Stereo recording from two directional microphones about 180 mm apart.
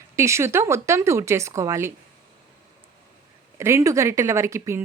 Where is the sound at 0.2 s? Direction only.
15° right (ahead or behind).